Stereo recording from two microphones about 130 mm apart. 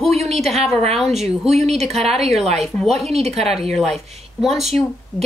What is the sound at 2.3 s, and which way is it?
A woman's voice, 55° right (ahead or behind).